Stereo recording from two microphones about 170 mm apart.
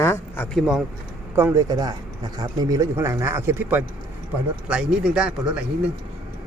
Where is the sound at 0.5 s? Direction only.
5° right (ahead or behind).